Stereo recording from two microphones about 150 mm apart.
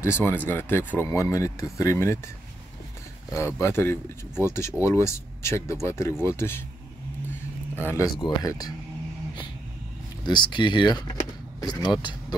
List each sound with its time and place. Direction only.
0.0 s speech: 15° left (ahead or behind)
7.7 s speech: 15° left (ahead or behind)
10.2 s speech: 30° left (ahead or behind)